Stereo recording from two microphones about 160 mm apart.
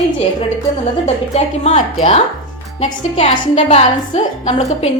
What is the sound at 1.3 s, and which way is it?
Speech, 40° left (ahead or behind).